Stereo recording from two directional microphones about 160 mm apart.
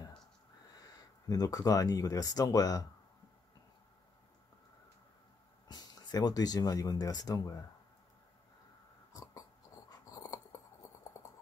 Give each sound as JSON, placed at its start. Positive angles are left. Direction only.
{"t": 0.8, "sound": "speech", "side_deg": 25}
{"t": 5.7, "sound": "speech", "side_deg": 25}
{"t": 9.1, "sound": "a sound", "side_deg": 25}
{"t": 9.8, "sound": "dog", "side_deg": 25}